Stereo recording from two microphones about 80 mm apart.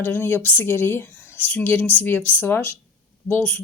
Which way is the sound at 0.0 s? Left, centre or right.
Left.